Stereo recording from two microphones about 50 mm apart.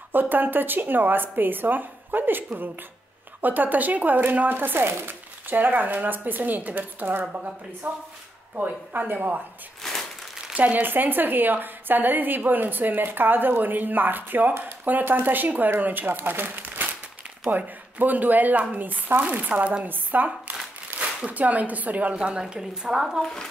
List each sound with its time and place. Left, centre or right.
0.1 s speech: right
7.3 s speech: right
8.6 s speech: right
9.8 s crumpling: centre
10.5 s speech: right
19.5 s speech: right
20.9 s a sound: right
21.3 s speech: right
22.1 s speech: centre